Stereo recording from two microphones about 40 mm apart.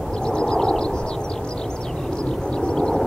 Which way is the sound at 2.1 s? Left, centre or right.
Left.